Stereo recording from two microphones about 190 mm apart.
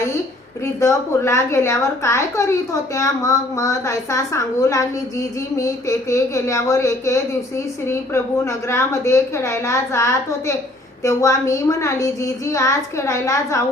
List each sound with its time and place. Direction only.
0.6 s a woman's voice: 15° left (ahead or behind)